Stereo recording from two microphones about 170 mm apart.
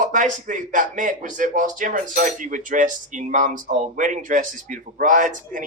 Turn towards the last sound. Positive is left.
turn(degrees=-50)  # may be behind; listen again after turning